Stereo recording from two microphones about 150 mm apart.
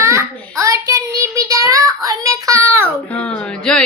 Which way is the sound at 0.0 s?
20° right (ahead or behind).